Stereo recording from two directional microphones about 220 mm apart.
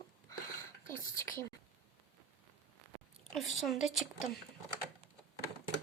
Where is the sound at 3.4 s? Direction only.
Centre (ahead or behind).